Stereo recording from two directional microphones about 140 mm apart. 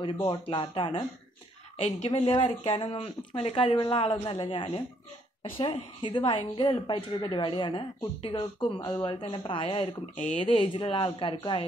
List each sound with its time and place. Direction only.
0.2 s speech: 35° left (ahead or behind)
1.8 s speech: 50° left (ahead or behind)